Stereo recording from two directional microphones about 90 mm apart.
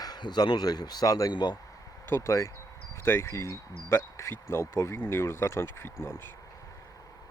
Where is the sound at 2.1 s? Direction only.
35° left (ahead or behind).